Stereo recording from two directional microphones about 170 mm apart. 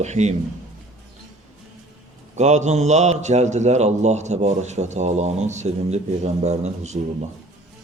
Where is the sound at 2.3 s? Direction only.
45° right (ahead or behind).